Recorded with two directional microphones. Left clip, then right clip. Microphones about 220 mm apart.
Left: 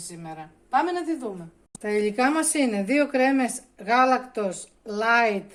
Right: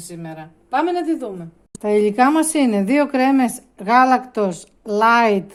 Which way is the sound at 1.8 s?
35° right (ahead or behind).